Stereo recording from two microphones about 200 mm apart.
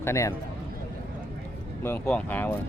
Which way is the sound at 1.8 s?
10° left (ahead or behind).